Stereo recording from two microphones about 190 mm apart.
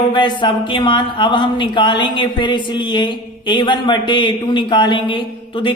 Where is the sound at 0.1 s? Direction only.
25° left (ahead or behind).